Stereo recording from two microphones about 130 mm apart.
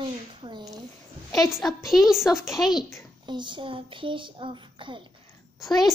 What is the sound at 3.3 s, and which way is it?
Child singing, 35° right (ahead or behind).